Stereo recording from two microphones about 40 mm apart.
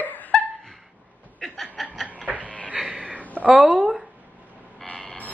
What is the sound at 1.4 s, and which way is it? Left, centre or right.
Chuckle, centre.